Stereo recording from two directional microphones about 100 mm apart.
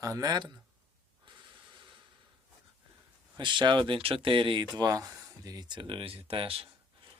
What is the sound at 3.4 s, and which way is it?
Speech, 50° right (ahead or behind).